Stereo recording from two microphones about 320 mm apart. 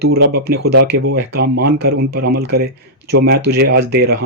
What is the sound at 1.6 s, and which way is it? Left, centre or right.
Speech, right.